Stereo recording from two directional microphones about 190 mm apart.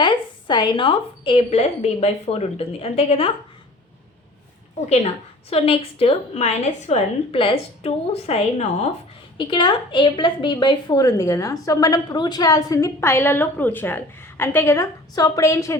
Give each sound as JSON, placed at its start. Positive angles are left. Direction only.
{"t": 0.0, "sound": "a woman's voice", "side_deg": 25}
{"t": 5.5, "sound": "a woman's voice", "side_deg": 30}
{"t": 9.4, "sound": "a woman's voice", "side_deg": 25}